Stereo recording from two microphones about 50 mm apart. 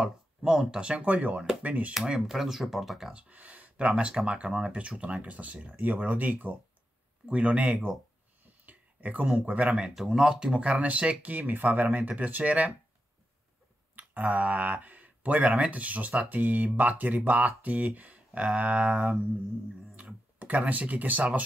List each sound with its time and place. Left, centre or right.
0.0 s speech: centre; by 2.0 s right
2.0 s speech: centre
3.3 s a sound: right
3.8 s speech: centre; by 6.6 s right
7.2 s speech: right
8.6 s a sound: right
9.3 s speech: right
9.8 s speech: centre; by 12.7 s right
13.9 s speech: right